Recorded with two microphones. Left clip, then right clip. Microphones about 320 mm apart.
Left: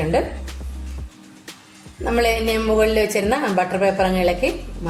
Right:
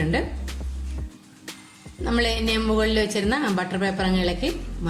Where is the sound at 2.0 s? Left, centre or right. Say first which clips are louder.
Left 5 dB; left.